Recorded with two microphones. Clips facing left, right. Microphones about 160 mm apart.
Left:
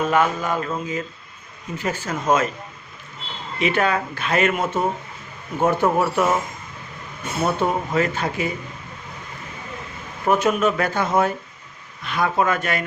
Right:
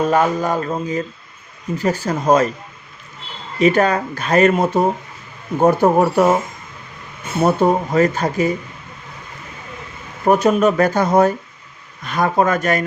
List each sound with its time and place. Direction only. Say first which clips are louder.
0.1 s speech: right 4 dB; 40° right (ahead or behind)
3.6 s speech: right 6 dB; 40° right (ahead or behind)
7.4 s speech: right 7 dB; 40° right (ahead or behind)
10.2 s speech: right 5 dB; 40° right (ahead or behind)